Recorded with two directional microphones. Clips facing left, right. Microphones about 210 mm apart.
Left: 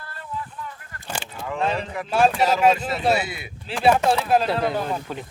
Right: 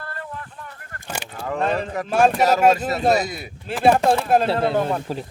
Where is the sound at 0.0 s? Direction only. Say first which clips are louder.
Even; 60° right (ahead or behind).